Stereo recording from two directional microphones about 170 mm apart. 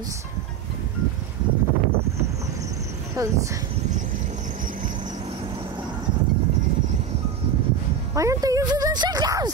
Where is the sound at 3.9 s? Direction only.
45° right (ahead or behind).